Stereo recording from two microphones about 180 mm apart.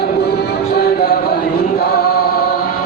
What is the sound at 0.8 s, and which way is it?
Music, 60° left (ahead or behind).